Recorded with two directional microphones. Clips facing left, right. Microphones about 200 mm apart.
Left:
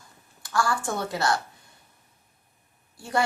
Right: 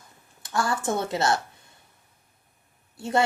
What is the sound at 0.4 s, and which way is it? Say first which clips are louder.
Speech: right 1 dB; 20° right (ahead or behind).